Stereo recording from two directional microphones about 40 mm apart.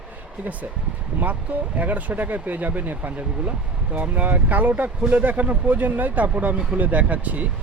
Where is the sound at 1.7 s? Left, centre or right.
Right.